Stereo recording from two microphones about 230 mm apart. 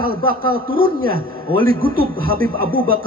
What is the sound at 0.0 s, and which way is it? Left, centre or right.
Speech, right.